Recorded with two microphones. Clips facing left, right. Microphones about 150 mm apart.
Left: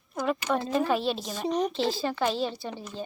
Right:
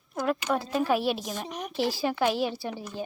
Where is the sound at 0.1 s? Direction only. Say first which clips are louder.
Even; centre (ahead or behind).